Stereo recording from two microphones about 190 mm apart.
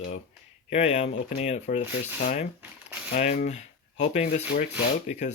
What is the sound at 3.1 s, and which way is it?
Speech, 45° left (ahead or behind).